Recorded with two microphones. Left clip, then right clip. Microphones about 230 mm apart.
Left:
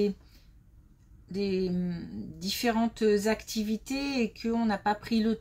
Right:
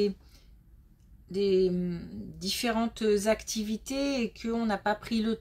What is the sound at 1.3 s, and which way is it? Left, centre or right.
Speech, right.